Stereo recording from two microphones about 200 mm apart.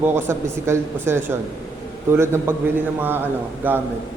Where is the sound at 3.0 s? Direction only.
10° right (ahead or behind).